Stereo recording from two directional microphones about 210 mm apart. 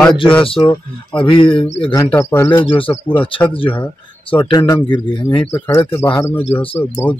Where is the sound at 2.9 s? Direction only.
10° left (ahead or behind).